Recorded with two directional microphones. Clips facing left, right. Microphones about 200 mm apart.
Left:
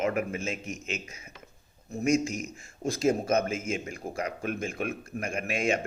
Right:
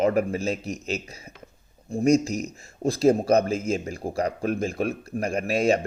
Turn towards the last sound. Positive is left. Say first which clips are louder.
# right 6 dB
turn(degrees=-35)  # may be behind; listen again after turning